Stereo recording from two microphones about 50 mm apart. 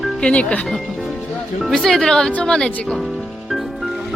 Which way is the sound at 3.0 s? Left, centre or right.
Centre.